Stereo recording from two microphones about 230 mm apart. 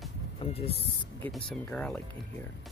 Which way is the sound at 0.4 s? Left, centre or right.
Left.